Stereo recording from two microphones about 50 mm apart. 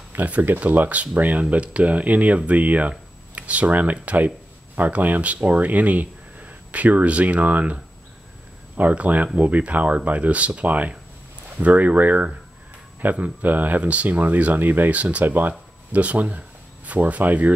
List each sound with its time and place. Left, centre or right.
0.1 s speech: right